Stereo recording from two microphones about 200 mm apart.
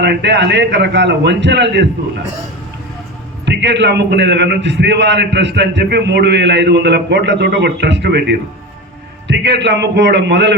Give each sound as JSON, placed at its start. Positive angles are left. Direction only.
{"t": 0.0, "sound": "a man's voice", "side_deg": -60}
{"t": 3.4, "sound": "a man's voice", "side_deg": -60}